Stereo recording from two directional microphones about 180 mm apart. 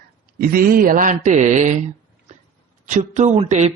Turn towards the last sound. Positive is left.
turn(degrees=-40)  # may be behind; listen again after turning